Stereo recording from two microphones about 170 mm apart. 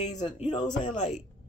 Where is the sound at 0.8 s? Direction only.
45° left (ahead or behind).